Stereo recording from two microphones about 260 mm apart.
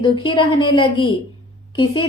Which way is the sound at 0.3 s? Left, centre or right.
Centre.